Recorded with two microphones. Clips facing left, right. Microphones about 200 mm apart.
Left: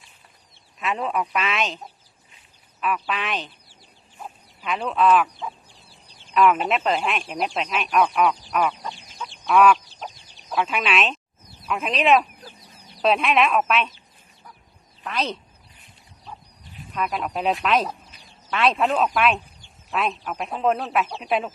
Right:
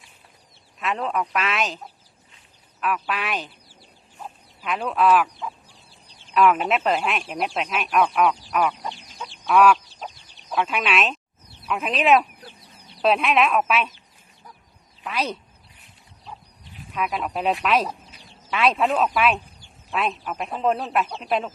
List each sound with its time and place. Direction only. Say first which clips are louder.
0.8 s speech: even; 5° left (ahead or behind)
2.8 s speech: even; centre (ahead or behind)
8.8 s chicken: right 1 dB; 25° right (ahead or behind)
9.5 s speech: even; centre (ahead or behind)
15.0 s speech: even; 10° right (ahead or behind)
16.9 s speech: even; centre (ahead or behind)